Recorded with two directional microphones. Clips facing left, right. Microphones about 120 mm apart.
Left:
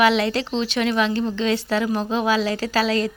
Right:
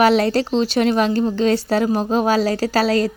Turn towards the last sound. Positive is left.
turn(degrees=-40)  # may be behind; listen again after turning